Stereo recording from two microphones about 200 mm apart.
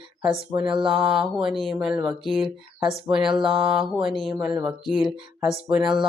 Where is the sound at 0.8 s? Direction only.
Centre (ahead or behind).